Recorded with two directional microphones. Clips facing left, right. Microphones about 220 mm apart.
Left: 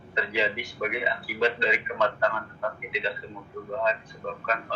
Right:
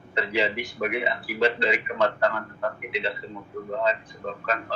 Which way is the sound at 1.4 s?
35° right (ahead or behind).